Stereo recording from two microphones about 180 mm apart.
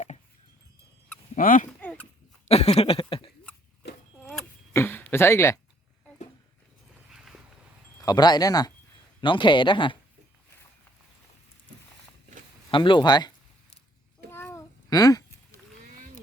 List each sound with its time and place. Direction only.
1.4 s speech: 50° left (ahead or behind)
1.8 s horse: 10° left (ahead or behind)
2.5 s a sound: 35° left (ahead or behind)
4.2 s keys jangling: centre (ahead or behind)
4.7 s a sound: 10° left (ahead or behind)
7.1 s cat: centre (ahead or behind)
8.0 s speech: 25° left (ahead or behind)
12.7 s speech: 25° left (ahead or behind)
14.3 s babbling: 15° left (ahead or behind)